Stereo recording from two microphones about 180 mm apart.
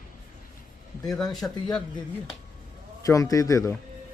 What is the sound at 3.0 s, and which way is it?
Speech, 20° left (ahead or behind).